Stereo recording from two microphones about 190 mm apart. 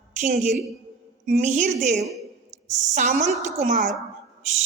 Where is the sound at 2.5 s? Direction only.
40° right (ahead or behind).